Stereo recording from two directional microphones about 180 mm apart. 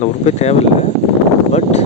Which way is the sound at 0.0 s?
40° left (ahead or behind).